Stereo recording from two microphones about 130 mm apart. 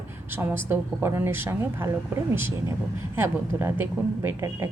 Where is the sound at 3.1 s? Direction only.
15° right (ahead or behind).